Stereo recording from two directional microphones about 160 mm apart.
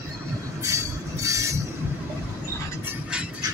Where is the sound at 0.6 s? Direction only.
20° right (ahead or behind).